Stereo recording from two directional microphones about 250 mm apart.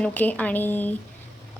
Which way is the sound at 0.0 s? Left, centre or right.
Centre.